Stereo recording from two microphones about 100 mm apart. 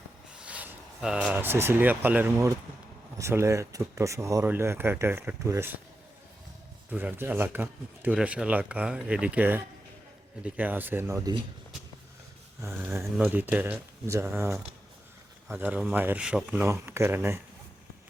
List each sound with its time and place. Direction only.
0.4 s a sound: 15° right (ahead or behind)
1.0 s speech: 10° right (ahead or behind)
6.9 s speech: 15° right (ahead or behind)
12.6 s speech: 25° right (ahead or behind)
16.6 s speech: 30° right (ahead or behind)